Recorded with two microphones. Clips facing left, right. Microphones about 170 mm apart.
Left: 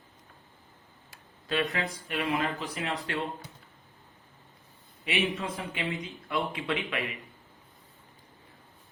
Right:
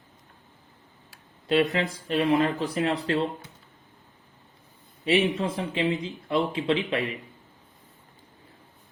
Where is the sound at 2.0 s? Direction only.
35° right (ahead or behind).